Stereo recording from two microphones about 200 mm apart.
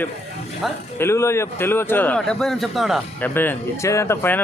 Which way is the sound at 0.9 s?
15° left (ahead or behind).